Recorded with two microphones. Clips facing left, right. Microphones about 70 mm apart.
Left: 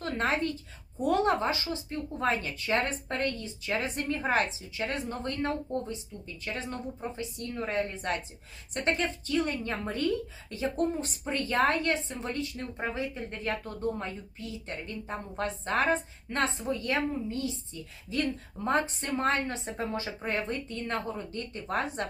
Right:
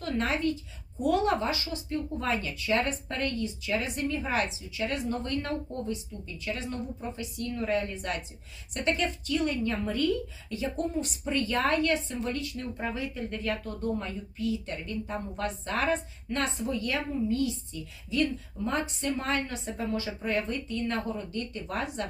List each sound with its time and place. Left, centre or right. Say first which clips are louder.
0.0 s a woman's voice: right 1 dB; left